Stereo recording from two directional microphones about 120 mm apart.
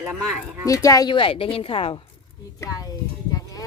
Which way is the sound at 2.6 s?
30° left (ahead or behind).